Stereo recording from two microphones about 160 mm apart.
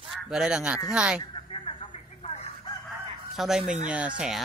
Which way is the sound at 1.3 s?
30° left (ahead or behind).